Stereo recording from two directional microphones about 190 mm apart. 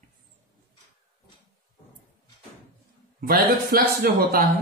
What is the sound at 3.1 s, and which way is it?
A man's voice, 50° right (ahead or behind).